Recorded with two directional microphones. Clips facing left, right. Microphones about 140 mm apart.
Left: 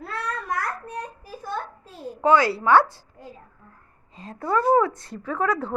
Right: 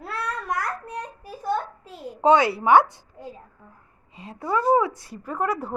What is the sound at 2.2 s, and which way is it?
A woman's voice, 20° right (ahead or behind).